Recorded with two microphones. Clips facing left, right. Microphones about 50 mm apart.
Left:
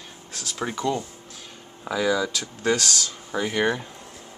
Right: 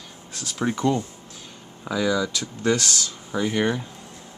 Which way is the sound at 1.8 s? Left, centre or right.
Centre.